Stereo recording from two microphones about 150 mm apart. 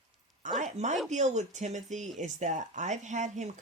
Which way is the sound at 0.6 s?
50° right (ahead or behind).